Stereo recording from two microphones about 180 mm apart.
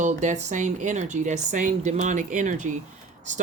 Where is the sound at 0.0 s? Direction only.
40° right (ahead or behind).